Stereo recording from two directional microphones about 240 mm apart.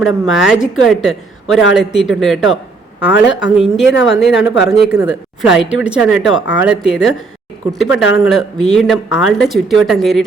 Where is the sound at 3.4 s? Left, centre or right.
Centre.